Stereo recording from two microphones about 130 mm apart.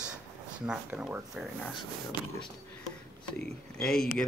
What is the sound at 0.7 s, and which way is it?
Speech, 5° right (ahead or behind).